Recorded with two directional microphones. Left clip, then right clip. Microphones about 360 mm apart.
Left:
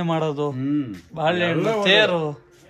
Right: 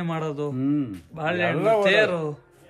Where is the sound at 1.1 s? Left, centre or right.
Centre.